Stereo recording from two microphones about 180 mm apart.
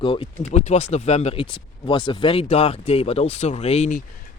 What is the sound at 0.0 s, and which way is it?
Speech, 30° left (ahead or behind).